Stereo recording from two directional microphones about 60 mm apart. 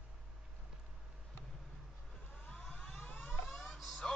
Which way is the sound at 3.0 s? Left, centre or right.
Left.